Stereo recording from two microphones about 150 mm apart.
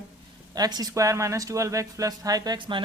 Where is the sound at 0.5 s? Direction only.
25° right (ahead or behind).